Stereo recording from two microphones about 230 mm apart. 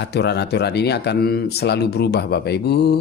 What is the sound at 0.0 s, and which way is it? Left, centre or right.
Speech, left.